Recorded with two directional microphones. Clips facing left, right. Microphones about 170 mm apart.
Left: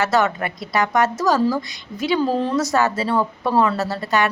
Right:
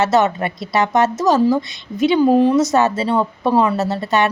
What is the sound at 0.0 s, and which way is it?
A woman's voice, 20° right (ahead or behind).